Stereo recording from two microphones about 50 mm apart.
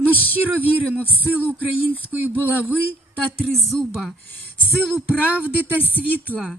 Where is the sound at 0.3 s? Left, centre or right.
Right.